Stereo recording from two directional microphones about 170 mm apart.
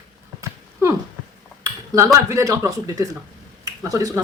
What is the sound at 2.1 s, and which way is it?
Speech, 20° right (ahead or behind).